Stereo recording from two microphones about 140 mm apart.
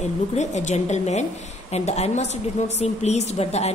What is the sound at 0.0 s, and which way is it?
A woman's voice, 55° left (ahead or behind).